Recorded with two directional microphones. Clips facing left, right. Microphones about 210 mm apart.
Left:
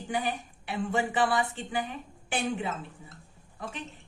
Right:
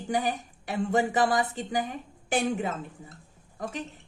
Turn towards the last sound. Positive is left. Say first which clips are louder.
# right 4 dB
turn(degrees=-45)  # may be behind; listen again after turning